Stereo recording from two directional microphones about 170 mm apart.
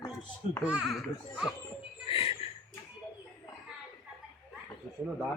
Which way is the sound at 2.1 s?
35° left (ahead or behind).